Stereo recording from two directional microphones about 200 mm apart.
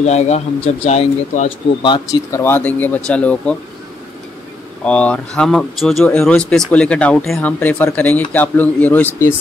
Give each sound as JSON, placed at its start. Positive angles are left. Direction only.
{"t": 0.0, "sound": "speech", "side_deg": 35}
{"t": 1.8, "sound": "speech", "side_deg": 20}
{"t": 4.8, "sound": "speech", "side_deg": 5}